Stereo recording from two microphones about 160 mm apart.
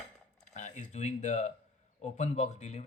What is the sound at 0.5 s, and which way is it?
Speech, 50° left (ahead or behind).